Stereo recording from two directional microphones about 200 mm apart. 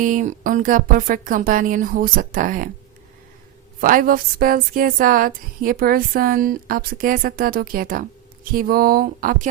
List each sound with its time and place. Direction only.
0.0 s speech: 40° right (ahead or behind)
3.8 s speech: 45° right (ahead or behind)